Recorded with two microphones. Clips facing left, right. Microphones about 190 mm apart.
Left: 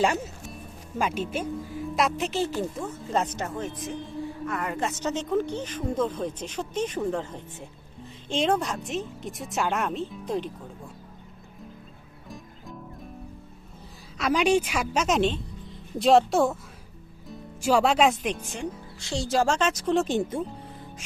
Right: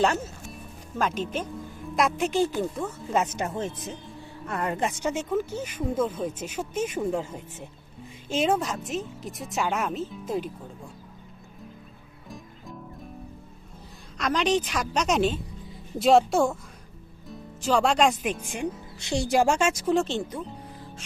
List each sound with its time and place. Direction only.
0.9 s speech: 10° left (ahead or behind); by 3.5 s 10° right (ahead or behind)
4.4 s a woman's voice: 30° right (ahead or behind)
4.8 s speech: 15° right (ahead or behind)
12.3 s music: centre (ahead or behind)
14.2 s speech: 10° left (ahead or behind)
17.6 s speech: 10° left (ahead or behind)
20.1 s speech: 20° left (ahead or behind)